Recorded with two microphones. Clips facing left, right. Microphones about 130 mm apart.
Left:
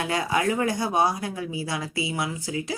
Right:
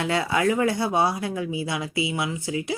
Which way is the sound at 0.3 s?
25° left (ahead or behind).